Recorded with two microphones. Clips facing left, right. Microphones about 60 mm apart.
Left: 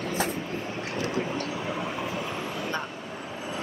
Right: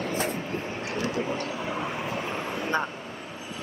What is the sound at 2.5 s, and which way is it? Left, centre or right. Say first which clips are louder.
Vehicle: right 4 dB; right.